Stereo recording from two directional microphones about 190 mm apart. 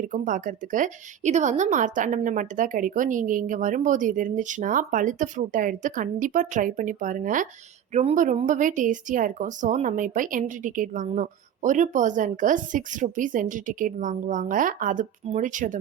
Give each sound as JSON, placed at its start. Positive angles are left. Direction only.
{"t": 0.0, "sound": "a woman's voice", "side_deg": -45}